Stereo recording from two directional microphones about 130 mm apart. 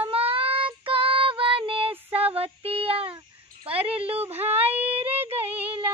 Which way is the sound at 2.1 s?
50° right (ahead or behind).